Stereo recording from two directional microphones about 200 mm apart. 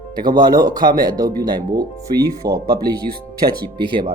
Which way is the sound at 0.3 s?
20° right (ahead or behind).